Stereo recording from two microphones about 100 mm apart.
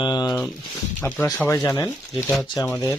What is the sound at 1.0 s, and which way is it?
Speech, 20° left (ahead or behind).